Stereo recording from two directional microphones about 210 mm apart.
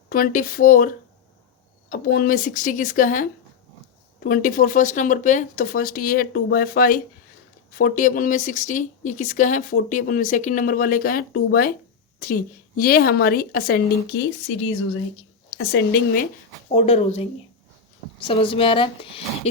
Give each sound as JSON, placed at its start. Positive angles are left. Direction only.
{"t": 0.1, "sound": "speech", "side_deg": 40}
{"t": 15.7, "sound": "speech", "side_deg": 50}
{"t": 16.7, "sound": "speech", "side_deg": 30}